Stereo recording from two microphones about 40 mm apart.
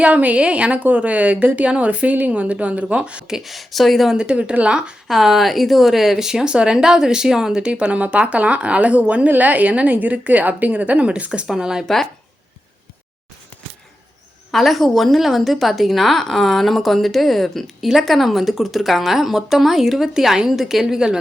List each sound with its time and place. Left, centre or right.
0.0 s a woman's voice: right
3.2 s speech: centre
3.5 s a woman's voice: centre
4.1 s speech: right
5.0 s speech: centre
7.6 s a woman's voice: right
11.4 s speech: centre
14.5 s a woman's voice: centre
20.8 s speech: centre